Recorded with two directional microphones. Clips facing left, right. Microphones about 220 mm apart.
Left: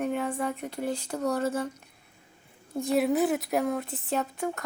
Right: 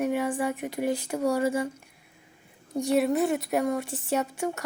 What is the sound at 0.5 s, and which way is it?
Speech, 15° right (ahead or behind).